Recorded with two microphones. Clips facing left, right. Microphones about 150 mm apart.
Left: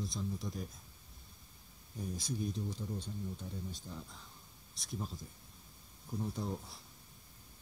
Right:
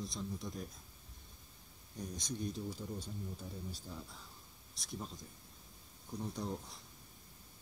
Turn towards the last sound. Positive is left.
turn(degrees=0)  # may be behind; listen again after turning